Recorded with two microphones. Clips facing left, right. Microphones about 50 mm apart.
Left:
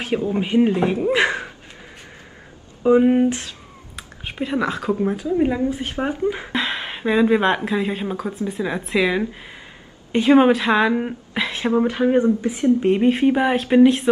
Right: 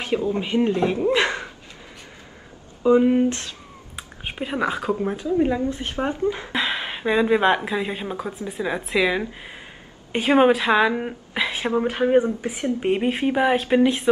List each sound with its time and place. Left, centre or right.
0.3 s speech: centre
2.8 s speech: centre
3.9 s whispering: centre
4.9 s speech: centre
5.5 s speech: centre
6.5 s speech: centre
10.1 s a woman's voice: centre
10.4 s a woman's voice: centre
12.3 s a woman's voice: right
13.1 s speech: centre